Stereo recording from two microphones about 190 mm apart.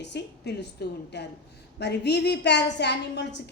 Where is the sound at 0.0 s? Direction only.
60° left (ahead or behind).